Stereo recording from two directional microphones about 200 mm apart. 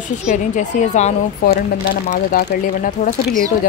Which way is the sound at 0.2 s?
40° left (ahead or behind).